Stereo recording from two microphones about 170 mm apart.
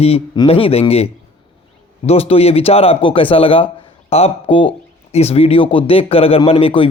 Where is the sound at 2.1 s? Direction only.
35° left (ahead or behind).